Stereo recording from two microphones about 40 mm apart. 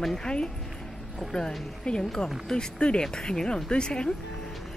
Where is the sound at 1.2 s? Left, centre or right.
Centre.